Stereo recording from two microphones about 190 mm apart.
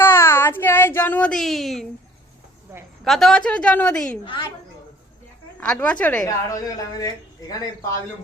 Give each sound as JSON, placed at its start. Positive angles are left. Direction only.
{"t": 0.0, "sound": "child singing", "side_deg": 10}
{"t": 3.0, "sound": "a woman's voice", "side_deg": 0}
{"t": 5.5, "sound": "a woman's voice", "side_deg": 5}